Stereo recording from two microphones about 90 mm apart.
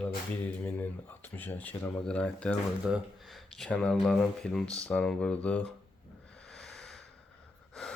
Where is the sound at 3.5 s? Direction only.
10° left (ahead or behind).